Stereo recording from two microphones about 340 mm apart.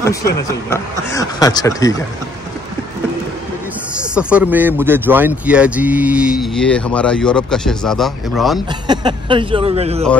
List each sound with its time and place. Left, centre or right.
0.0 s speech: centre
4.1 s speech: centre
8.8 s speech: centre